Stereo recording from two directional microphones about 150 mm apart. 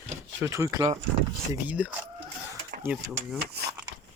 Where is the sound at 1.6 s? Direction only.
10° right (ahead or behind).